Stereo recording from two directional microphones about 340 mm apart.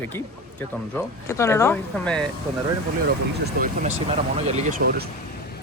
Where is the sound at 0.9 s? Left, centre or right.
Centre.